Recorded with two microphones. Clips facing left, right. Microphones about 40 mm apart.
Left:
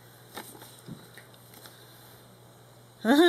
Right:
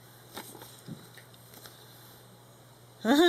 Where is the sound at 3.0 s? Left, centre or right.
Centre.